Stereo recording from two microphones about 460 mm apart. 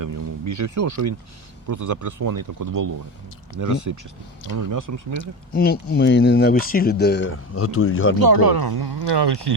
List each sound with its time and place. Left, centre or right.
0.0 s speech: right
5.1 s speech: centre
8.2 s speech: right